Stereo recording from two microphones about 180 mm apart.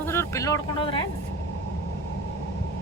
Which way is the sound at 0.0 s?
15° left (ahead or behind).